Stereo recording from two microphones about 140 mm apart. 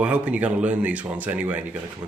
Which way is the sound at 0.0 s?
10° right (ahead or behind).